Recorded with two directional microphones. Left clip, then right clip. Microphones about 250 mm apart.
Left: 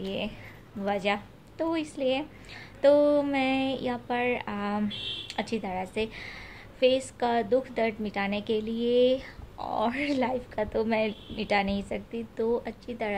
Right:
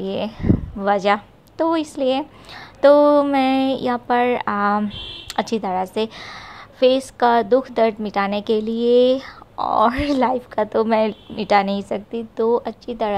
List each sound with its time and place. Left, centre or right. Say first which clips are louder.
0.0 s a woman's voice: right 10 dB; right